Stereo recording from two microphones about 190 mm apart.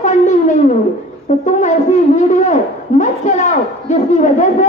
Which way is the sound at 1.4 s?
40° left (ahead or behind).